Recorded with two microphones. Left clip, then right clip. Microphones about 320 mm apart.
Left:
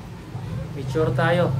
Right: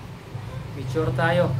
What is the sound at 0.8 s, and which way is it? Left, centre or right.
Speech, centre.